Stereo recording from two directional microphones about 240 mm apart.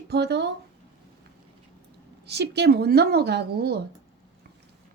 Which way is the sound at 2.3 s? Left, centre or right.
Right.